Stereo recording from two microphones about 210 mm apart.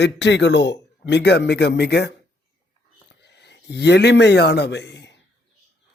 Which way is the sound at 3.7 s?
55° left (ahead or behind).